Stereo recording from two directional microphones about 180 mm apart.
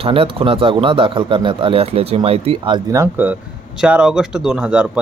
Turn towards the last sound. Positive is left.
turn(degrees=-5)  # may be behind; listen again after turning